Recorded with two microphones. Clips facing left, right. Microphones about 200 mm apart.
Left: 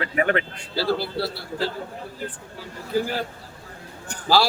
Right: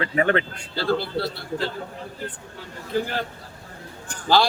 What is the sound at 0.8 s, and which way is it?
Speech, 5° left (ahead or behind).